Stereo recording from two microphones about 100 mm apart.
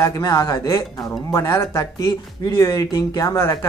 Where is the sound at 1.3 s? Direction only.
25° left (ahead or behind).